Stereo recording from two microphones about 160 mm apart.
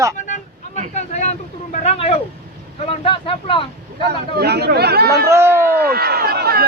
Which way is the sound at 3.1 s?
30° left (ahead or behind).